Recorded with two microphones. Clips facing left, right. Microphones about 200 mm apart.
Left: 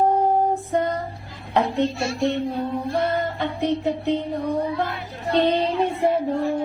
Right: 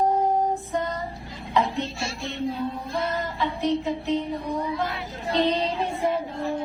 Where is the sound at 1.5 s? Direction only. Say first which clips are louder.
Left 4 dB; 60° left (ahead or behind).